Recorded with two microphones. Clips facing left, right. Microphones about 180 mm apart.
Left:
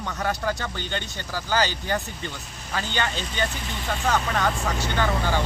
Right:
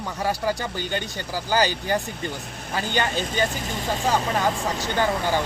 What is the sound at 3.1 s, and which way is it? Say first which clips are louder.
Speech: right 4 dB; 45° right (ahead or behind).